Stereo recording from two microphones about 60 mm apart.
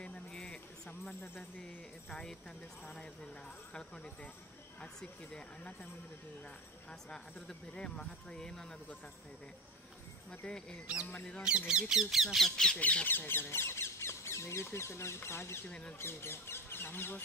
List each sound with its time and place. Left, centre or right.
0.0 s music: centre
1.6 s speech: centre
3.7 s speech: centre
5.3 s speech: left
6.9 s speech: centre
10.4 s speech: centre
11.4 s speech: centre
12.7 s speech: left